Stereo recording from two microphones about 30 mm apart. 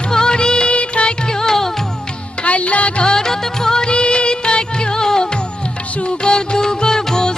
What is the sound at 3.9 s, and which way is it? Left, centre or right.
Music, left.